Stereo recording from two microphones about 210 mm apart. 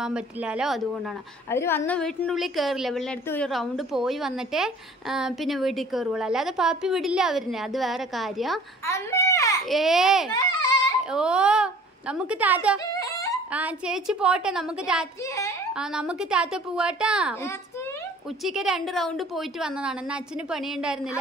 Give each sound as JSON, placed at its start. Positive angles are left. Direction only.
{"t": 0.0, "sound": "a woman's voice", "side_deg": -5}
{"t": 1.5, "sound": "a woman's voice", "side_deg": 10}
{"t": 8.8, "sound": "baby cry", "side_deg": 15}
{"t": 9.7, "sound": "a woman's voice", "side_deg": 0}
{"t": 10.3, "sound": "a sound", "side_deg": 20}
{"t": 11.1, "sound": "a woman's voice", "side_deg": -5}
{"t": 12.9, "sound": "a sound", "side_deg": 15}
{"t": 13.5, "sound": "a woman's voice", "side_deg": -5}
{"t": 18.4, "sound": "a woman's voice", "side_deg": 0}